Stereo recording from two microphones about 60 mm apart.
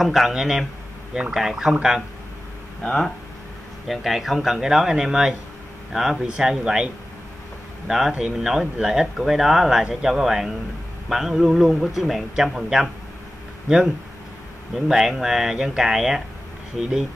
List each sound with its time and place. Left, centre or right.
0.0 s a man's voice: centre
2.8 s speech: centre
3.8 s a man's voice: centre
7.9 s a man's voice: centre